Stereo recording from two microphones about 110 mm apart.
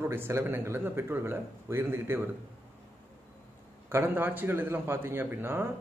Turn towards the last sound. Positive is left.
turn(degrees=-20)  # may be behind; listen again after turning